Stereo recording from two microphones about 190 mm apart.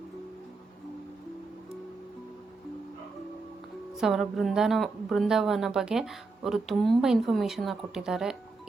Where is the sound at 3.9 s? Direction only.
Centre (ahead or behind).